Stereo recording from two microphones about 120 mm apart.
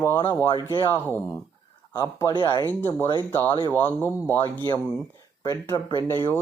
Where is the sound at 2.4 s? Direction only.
40° left (ahead or behind).